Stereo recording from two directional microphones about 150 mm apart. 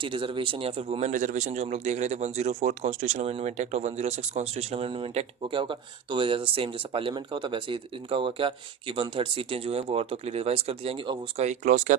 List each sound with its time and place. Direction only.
0.0 s a man's voice: 35° right (ahead or behind)
11.4 s speech: 55° right (ahead or behind)